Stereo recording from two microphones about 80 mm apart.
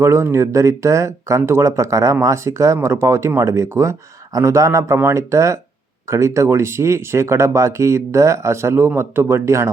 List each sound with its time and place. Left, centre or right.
0.0 s speech: right